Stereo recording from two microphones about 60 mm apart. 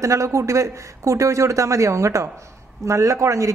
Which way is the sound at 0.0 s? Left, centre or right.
Right.